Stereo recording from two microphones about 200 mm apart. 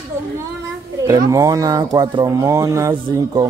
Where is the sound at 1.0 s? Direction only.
15° right (ahead or behind).